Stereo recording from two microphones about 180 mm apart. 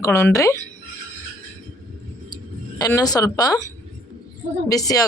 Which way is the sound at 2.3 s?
20° left (ahead or behind).